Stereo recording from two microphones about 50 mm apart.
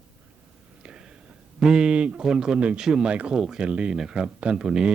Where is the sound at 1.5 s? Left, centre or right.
Centre.